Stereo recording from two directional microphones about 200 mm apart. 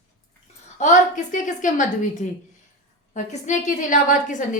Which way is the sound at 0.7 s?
40° left (ahead or behind).